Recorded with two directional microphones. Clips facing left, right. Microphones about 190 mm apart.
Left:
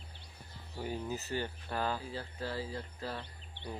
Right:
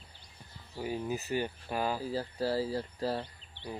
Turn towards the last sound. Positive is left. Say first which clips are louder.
# right 8 dB
turn(degrees=-35)  # may be behind; listen again after turning